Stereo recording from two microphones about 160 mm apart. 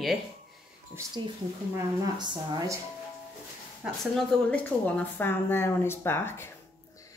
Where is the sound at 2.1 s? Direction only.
25° right (ahead or behind).